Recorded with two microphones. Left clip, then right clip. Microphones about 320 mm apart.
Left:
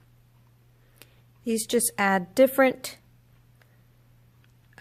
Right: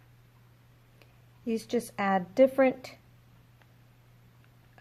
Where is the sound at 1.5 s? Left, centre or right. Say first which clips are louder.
Left 6 dB; left.